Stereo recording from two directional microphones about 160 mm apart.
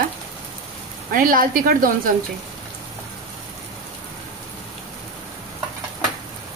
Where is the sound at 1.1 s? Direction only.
60° right (ahead or behind).